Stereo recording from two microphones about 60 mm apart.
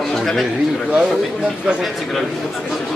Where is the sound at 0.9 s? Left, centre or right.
Centre.